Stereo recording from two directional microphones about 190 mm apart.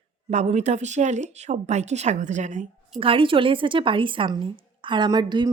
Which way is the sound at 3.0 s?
30° right (ahead or behind).